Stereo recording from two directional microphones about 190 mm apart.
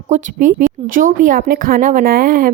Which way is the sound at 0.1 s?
40° right (ahead or behind).